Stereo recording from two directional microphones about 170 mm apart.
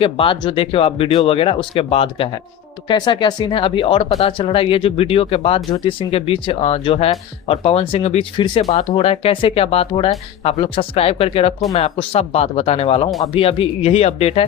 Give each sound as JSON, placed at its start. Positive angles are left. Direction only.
{"t": 0.0, "sound": "speech", "side_deg": 30}